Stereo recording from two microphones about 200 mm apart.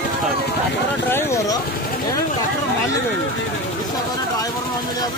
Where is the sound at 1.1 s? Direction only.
10° left (ahead or behind).